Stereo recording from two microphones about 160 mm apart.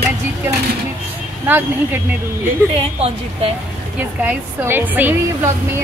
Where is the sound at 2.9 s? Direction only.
40° right (ahead or behind).